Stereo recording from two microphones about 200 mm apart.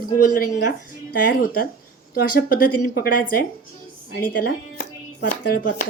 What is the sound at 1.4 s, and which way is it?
A woman's voice, 50° left (ahead or behind).